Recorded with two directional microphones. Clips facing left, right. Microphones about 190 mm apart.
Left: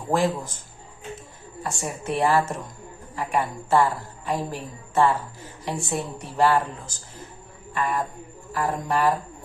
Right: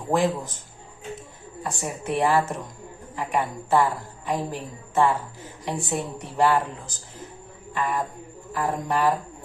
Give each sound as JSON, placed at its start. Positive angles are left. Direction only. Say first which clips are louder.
{"t": 1.6, "sound": "a woman's voice", "louder": "even", "side_deg": -15}